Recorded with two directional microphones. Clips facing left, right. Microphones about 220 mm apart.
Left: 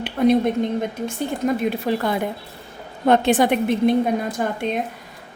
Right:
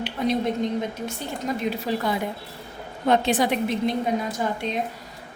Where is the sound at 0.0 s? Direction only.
55° left (ahead or behind).